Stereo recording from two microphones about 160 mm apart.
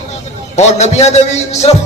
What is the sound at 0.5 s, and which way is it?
A man's voice, 45° left (ahead or behind).